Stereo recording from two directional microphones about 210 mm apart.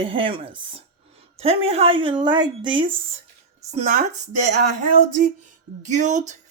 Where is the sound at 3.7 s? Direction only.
35° right (ahead or behind).